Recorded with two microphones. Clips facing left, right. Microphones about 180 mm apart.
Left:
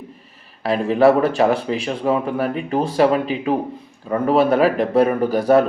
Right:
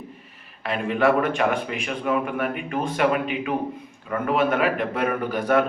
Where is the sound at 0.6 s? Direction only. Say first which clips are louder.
Left 7 dB; 35° left (ahead or behind).